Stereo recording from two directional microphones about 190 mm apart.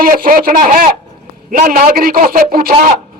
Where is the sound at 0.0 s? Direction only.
50° right (ahead or behind).